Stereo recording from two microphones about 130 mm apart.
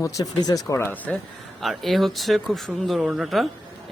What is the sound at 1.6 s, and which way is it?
Speech, centre (ahead or behind).